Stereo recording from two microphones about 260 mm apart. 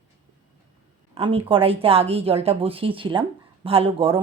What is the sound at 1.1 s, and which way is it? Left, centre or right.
Speech, right.